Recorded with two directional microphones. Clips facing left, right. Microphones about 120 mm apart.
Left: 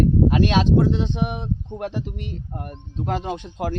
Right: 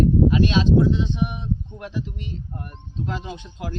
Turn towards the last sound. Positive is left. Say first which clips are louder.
# left 6 dB
turn(degrees=65)  # may be behind; listen again after turning